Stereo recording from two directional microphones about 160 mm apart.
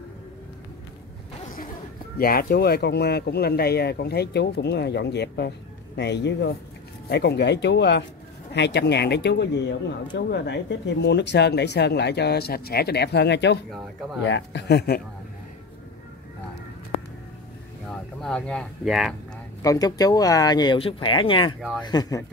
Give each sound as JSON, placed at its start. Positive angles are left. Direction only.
{"t": 2.1, "sound": "speech", "side_deg": 70}
{"t": 17.8, "sound": "speech", "side_deg": 5}
{"t": 19.6, "sound": "speech", "side_deg": 20}